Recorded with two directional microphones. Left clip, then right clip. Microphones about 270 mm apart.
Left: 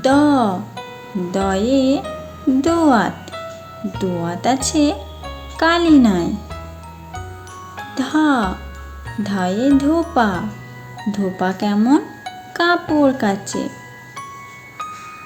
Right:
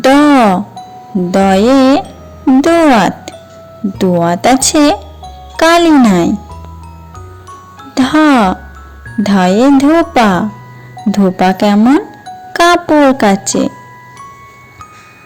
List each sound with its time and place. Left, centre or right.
0.0 s music: right
1.3 s speech: right
2.6 s music: right
3.9 s speech: right
7.9 s a woman's voice: right